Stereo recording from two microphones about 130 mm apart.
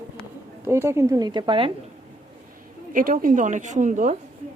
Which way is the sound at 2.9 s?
90° right.